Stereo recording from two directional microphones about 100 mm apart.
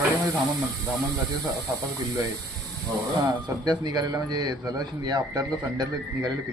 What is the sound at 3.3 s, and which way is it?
Speech, 40° right (ahead or behind).